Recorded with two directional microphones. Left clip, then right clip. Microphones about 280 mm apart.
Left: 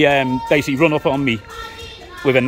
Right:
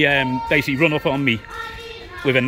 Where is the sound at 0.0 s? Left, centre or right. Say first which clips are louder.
Left 3 dB; centre.